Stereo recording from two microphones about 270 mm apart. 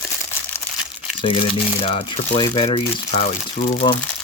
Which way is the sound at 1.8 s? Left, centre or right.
Centre.